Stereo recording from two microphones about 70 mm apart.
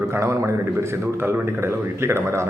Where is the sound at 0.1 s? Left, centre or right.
Right.